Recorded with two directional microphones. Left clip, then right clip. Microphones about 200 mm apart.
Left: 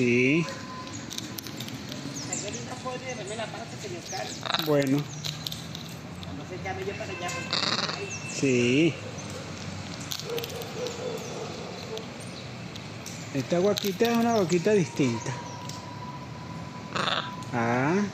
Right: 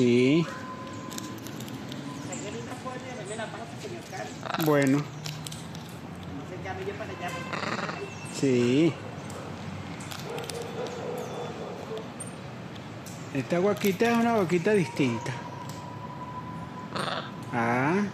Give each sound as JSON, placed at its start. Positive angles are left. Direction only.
{"t": 0.0, "sound": "speech", "side_deg": -20}
{"t": 4.5, "sound": "speech", "side_deg": -5}
{"t": 7.5, "sound": "a sound", "side_deg": 0}
{"t": 8.5, "sound": "speech", "side_deg": -50}
{"t": 13.5, "sound": "speech", "side_deg": 0}
{"t": 16.9, "sound": "a sound", "side_deg": 0}